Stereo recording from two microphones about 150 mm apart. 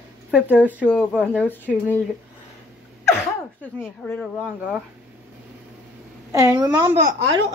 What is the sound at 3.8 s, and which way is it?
Speech, 5° left (ahead or behind).